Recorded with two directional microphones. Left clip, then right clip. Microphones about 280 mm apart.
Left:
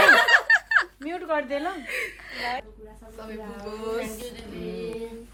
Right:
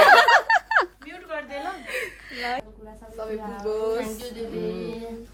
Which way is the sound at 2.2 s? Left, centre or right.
Centre.